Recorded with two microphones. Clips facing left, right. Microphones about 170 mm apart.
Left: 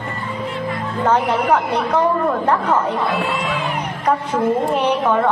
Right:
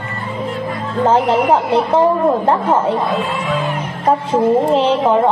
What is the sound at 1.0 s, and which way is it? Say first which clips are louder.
A woman's voice: right 4 dB; 25° right (ahead or behind).